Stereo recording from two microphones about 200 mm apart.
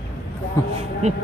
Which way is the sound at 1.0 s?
35° right (ahead or behind).